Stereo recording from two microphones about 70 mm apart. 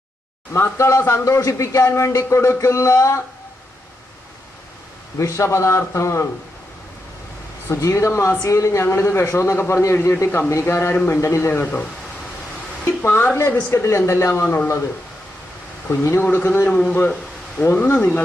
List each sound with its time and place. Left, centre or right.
0.5 s speech: left
5.1 s speech: left
7.7 s speech: left
10.9 s speech: left
11.2 s speech: left
11.6 s speech: left
14.4 s speech: left
15.9 s speech: left
16.2 s speech: left